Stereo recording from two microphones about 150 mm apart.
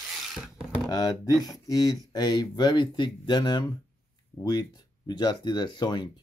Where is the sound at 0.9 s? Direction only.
25° left (ahead or behind).